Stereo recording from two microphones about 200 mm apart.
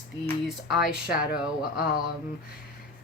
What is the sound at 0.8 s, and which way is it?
Speech, 45° left (ahead or behind).